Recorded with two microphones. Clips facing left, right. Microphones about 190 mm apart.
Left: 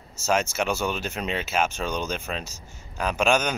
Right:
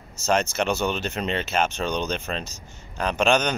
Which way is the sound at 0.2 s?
5° left (ahead or behind).